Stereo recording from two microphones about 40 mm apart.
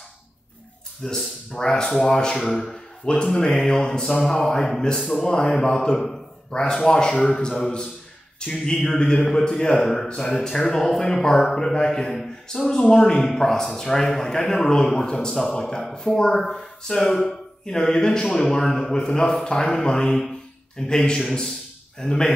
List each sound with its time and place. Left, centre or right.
1.0 s a man's voice: centre
1.5 s a man's voice: centre
2.7 s a sound: centre
3.3 s a man's voice: centre
5.2 s a man's voice: left
20.2 s a sound: centre
21.9 s speech: centre